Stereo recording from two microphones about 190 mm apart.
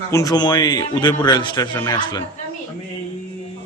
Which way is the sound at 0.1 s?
20° left (ahead or behind).